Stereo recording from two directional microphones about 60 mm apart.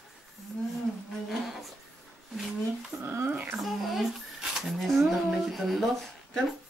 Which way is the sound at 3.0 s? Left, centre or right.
Right.